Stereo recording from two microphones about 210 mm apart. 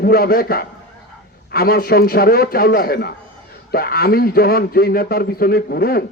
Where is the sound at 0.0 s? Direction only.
45° left (ahead or behind).